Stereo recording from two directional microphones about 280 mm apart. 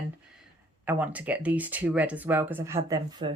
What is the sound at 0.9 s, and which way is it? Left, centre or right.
Speech, centre.